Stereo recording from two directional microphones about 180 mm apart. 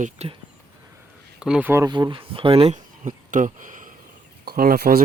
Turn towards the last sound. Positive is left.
turn(degrees=-60)  # may be behind; listen again after turning